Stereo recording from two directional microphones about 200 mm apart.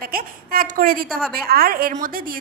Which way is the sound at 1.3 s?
50° right (ahead or behind).